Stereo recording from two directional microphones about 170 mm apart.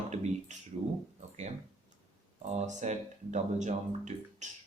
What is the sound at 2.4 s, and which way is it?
Speech, 40° right (ahead or behind).